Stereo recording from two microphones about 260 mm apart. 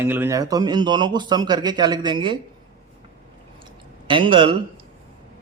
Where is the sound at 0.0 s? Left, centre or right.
Centre.